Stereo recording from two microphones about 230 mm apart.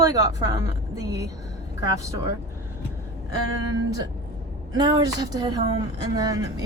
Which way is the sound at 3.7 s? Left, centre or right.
Centre.